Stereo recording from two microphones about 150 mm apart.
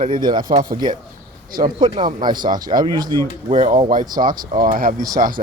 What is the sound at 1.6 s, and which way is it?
Speech, 30° right (ahead or behind).